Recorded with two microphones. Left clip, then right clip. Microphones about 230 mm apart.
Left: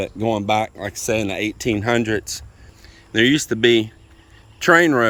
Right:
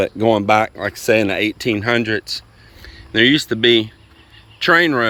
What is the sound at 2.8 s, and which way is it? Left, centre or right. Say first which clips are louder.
Speech: right 3 dB; centre.